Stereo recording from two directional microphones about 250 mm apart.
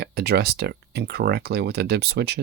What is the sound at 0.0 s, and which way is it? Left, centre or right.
Speech, right.